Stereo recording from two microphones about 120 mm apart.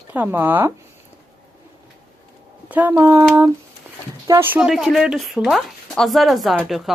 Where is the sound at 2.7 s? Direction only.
20° right (ahead or behind).